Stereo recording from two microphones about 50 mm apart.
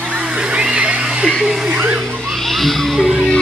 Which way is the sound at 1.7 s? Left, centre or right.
Right.